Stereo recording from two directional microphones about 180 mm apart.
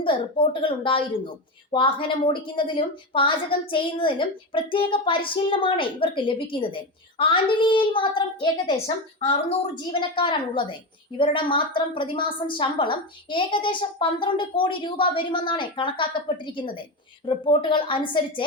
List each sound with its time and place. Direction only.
0.0 s a woman's voice: 30° left (ahead or behind)